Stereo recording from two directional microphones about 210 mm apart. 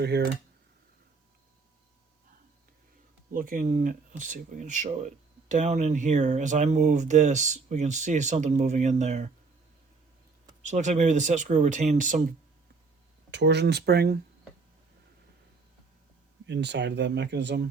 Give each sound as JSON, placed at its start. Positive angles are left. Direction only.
{"t": 0.1, "sound": "speech", "side_deg": -50}
{"t": 3.3, "sound": "speech", "side_deg": -40}
{"t": 10.7, "sound": "speech", "side_deg": -35}
{"t": 13.3, "sound": "speech", "side_deg": -55}
{"t": 16.5, "sound": "speech", "side_deg": -55}